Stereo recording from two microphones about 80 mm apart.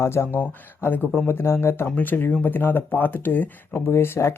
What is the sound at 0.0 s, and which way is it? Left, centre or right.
Speech, left.